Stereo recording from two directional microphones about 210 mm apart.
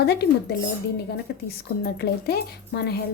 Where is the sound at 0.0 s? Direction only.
50° left (ahead or behind).